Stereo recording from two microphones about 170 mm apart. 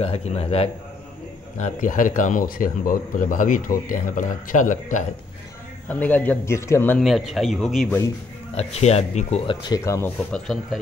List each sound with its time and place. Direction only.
0.0 s a man's voice: 35° left (ahead or behind)
1.6 s speech: 50° left (ahead or behind)
5.9 s a man's voice: 10° left (ahead or behind)
7.0 s speech: centre (ahead or behind)
8.5 s speech: 40° left (ahead or behind); by 10.8 s centre (ahead or behind)